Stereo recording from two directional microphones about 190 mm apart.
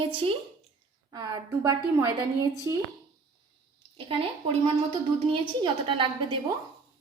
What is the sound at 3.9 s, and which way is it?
Speech, 30° right (ahead or behind).